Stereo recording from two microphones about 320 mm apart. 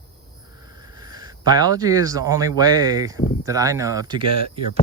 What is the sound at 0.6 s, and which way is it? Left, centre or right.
Speech, centre.